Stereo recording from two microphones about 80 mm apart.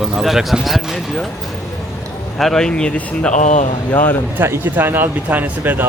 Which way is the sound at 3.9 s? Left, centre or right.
Left.